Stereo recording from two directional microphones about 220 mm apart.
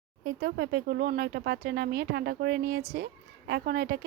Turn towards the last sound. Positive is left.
turn(degrees=-45)  # may be behind; listen again after turning